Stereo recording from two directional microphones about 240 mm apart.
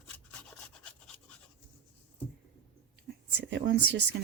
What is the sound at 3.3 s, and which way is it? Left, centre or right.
Speech, right.